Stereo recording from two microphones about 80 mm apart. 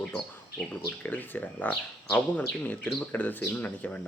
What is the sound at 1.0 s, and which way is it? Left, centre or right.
Speech, left.